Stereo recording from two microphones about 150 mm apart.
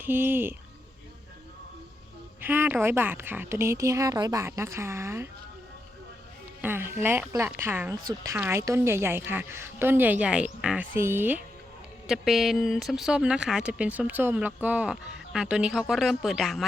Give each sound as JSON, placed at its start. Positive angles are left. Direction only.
{"t": 0.0, "sound": "a woman's voice", "side_deg": -15}
{"t": 2.4, "sound": "a woman's voice", "side_deg": -15}
{"t": 6.6, "sound": "a woman's voice", "side_deg": -15}
{"t": 12.0, "sound": "speech", "side_deg": 0}